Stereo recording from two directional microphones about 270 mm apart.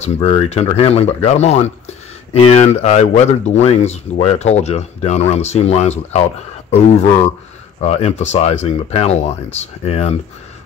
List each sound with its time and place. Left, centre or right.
0.0 s speech: left